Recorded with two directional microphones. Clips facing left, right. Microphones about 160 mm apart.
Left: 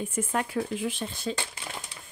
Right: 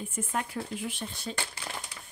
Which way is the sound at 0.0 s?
90° left.